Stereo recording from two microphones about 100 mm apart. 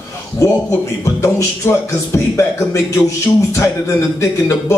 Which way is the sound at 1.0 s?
25° left (ahead or behind).